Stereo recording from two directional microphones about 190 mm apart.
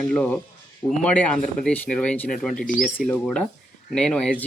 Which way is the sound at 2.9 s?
5° left (ahead or behind).